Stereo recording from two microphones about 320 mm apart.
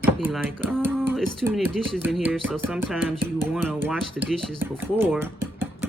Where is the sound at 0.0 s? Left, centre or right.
Centre.